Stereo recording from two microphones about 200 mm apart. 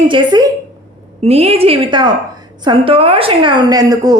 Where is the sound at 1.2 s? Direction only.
30° right (ahead or behind).